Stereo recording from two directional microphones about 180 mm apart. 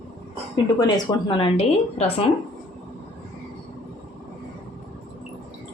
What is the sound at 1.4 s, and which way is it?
Speech, 30° left (ahead or behind).